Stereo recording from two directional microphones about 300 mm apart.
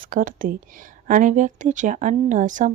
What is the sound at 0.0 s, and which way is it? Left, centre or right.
Speech, right.